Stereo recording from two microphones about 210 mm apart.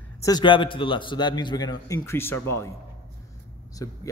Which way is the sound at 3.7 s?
15° left (ahead or behind).